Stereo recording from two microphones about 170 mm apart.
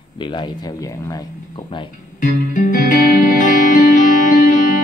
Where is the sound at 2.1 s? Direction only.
50° left (ahead or behind).